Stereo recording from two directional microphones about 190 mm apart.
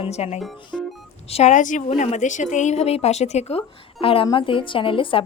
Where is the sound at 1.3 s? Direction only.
35° left (ahead or behind).